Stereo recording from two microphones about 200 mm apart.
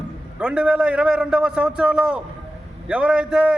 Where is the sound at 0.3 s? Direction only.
5° right (ahead or behind).